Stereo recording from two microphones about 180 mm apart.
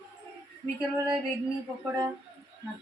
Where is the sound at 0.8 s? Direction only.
15° right (ahead or behind).